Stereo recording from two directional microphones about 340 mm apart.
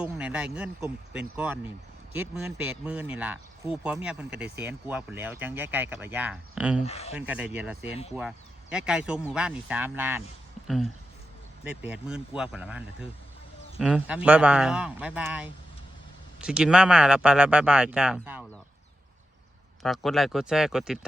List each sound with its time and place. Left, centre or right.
0.0 s speech: centre
6.8 s speech: centre
7.2 s speech: centre
19.8 s speech: centre